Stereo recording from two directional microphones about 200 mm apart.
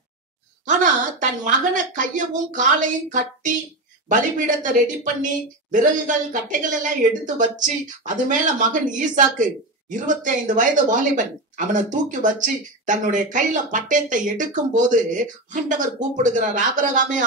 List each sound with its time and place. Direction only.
1.4 s a woman's voice: 40° right (ahead or behind)